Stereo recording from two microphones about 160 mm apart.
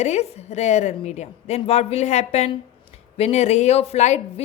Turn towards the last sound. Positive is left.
turn(degrees=45)  # may be behind; listen again after turning